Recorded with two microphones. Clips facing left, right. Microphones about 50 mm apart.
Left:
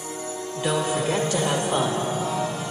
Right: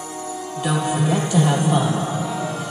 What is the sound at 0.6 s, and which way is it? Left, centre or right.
Music, right.